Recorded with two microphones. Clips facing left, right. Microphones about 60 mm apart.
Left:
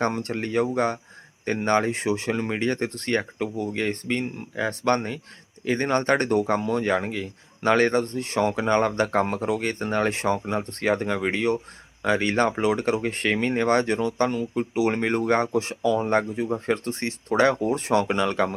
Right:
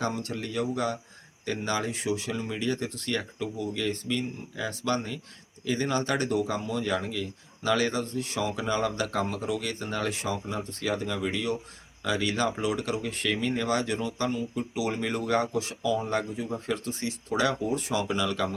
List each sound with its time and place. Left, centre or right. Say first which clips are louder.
0.0 s speech: left 5 dB; left